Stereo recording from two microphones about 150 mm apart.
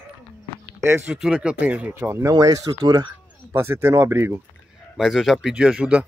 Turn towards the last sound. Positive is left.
turn(degrees=-10)  # may be behind; listen again after turning